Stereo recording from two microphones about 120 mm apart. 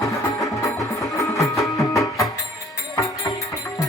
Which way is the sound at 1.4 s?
25° left (ahead or behind).